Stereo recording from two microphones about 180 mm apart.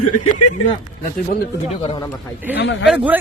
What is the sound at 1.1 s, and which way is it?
Speech, 55° left (ahead or behind).